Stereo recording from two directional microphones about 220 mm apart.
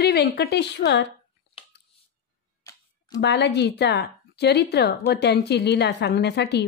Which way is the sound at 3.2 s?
50° left (ahead or behind).